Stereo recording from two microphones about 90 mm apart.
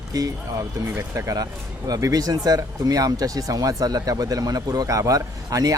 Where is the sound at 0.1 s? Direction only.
40° right (ahead or behind).